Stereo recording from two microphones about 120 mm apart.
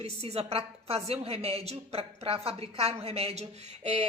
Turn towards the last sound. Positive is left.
turn(degrees=-65)  # may be behind; listen again after turning